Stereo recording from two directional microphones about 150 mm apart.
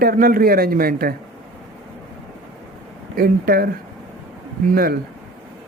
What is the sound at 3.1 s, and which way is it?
Speech, 90° right.